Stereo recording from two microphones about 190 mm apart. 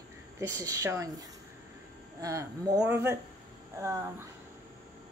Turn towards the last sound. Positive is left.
turn(degrees=-15)  # may be behind; listen again after turning